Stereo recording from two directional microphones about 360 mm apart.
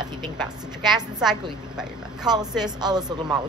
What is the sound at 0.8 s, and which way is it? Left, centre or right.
Speech, centre.